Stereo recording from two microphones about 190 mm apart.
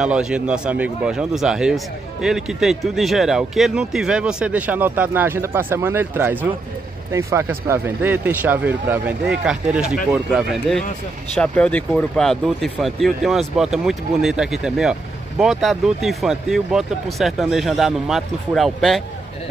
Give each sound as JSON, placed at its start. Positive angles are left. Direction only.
{"t": 0.0, "sound": "speech", "side_deg": -5}